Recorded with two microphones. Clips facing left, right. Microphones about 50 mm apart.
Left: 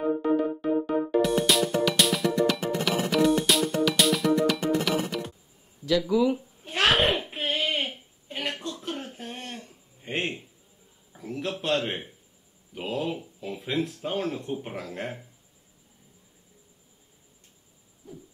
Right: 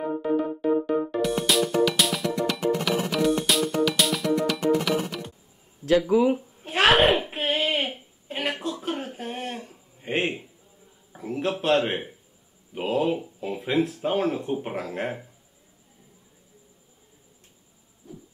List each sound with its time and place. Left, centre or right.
0.2 s music: centre
5.9 s speech: right
6.6 s a sound: centre
12.8 s speech: centre